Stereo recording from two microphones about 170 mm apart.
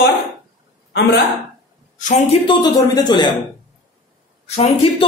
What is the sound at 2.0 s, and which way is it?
Speech, 45° left (ahead or behind).